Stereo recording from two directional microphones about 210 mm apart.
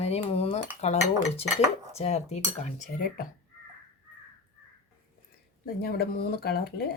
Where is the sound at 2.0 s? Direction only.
30° left (ahead or behind).